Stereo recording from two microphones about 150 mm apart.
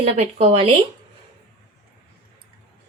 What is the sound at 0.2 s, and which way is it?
Speech, 45° right (ahead or behind).